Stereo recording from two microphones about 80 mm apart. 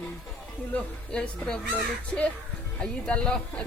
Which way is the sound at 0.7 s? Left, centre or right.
Centre.